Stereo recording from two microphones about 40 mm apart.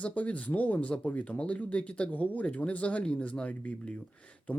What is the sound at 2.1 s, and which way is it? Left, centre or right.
Speech, left.